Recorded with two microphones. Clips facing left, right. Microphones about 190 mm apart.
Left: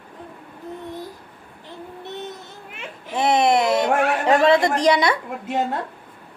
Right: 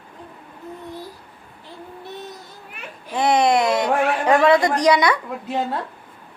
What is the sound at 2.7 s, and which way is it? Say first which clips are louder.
A child's voice: even; 25° left (ahead or behind).